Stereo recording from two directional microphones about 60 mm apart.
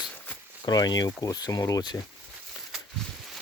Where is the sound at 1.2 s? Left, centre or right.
Left.